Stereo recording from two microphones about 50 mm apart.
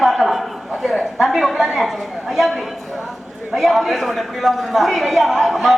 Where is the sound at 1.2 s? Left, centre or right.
Centre.